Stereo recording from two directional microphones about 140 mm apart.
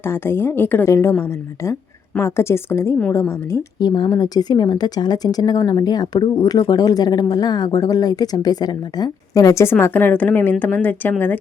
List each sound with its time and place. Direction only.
0.0 s a woman's voice: 15° left (ahead or behind)